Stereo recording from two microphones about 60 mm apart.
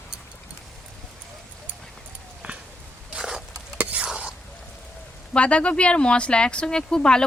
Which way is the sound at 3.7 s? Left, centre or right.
Centre.